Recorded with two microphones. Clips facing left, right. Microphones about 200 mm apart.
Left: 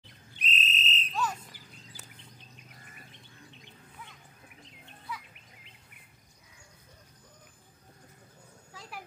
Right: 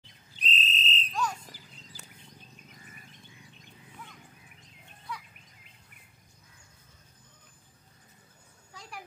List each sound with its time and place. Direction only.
0.4 s fire alarm: 35° right (ahead or behind)
1.1 s bird: 5° left (ahead or behind)
5.1 s bird: 5° left (ahead or behind)
8.7 s a sound: centre (ahead or behind)